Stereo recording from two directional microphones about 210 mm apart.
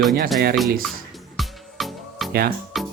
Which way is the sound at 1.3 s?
Centre (ahead or behind).